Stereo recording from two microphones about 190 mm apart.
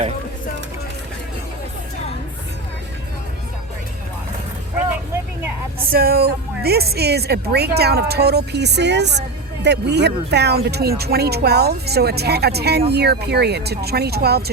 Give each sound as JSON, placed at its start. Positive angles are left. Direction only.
{"t": 5.9, "sound": "a woman's voice", "side_deg": -50}